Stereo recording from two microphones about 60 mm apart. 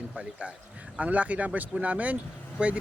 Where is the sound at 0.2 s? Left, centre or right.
Centre.